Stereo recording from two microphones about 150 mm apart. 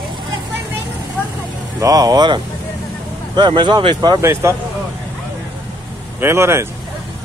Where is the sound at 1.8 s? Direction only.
25° right (ahead or behind).